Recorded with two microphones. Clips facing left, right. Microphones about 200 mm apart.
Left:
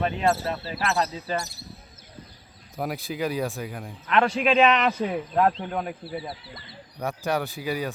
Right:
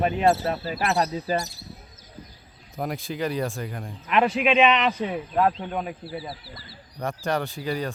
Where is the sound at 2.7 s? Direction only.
Centre (ahead or behind).